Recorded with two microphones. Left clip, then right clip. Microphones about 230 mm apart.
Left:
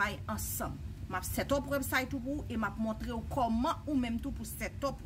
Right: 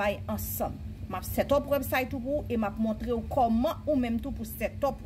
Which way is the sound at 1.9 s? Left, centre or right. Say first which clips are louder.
Right 5 dB; centre.